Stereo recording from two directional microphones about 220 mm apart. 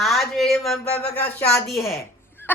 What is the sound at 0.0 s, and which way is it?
A woman's voice, centre (ahead or behind).